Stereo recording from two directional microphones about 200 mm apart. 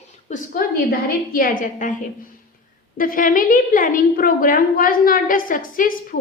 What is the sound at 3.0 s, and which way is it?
A woman's voice, 45° left (ahead or behind).